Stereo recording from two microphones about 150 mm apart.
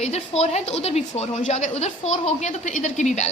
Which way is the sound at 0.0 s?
45° left (ahead or behind).